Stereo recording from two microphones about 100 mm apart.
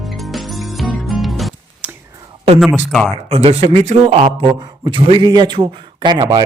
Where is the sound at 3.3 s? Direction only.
85° right.